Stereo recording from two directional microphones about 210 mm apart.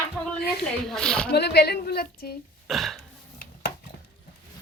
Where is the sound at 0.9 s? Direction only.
5° left (ahead or behind).